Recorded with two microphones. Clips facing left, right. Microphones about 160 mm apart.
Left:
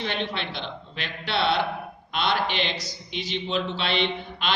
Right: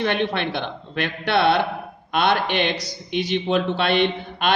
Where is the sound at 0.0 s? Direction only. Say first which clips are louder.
Right 7 dB; 55° right (ahead or behind).